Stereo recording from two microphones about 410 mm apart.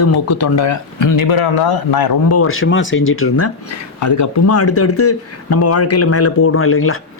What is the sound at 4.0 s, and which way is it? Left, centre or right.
Speech, left.